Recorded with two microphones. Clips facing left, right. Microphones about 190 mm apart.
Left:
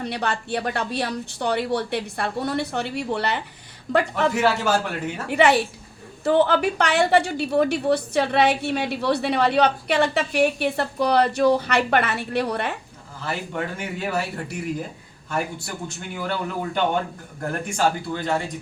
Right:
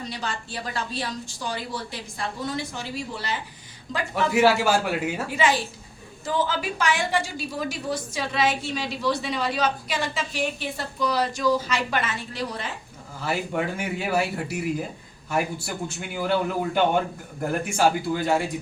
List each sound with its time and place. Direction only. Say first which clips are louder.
0.0 s a woman's voice: left 6 dB; 65° left (ahead or behind)
4.1 s a man's voice: right 1 dB; 10° right (ahead or behind)
5.3 s a woman's voice: left 8 dB; 65° left (ahead or behind)
13.2 s a man's voice: right 2 dB; 10° right (ahead or behind)
17.7 s a man's voice: right 1 dB; 5° right (ahead or behind)